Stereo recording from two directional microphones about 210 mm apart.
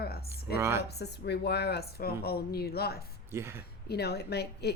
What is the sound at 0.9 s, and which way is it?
A woman's voice, 50° left (ahead or behind).